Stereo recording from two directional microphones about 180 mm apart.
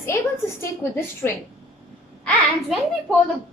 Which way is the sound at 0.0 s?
15° left (ahead or behind).